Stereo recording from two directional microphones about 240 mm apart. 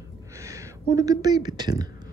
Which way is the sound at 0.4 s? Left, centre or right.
Centre.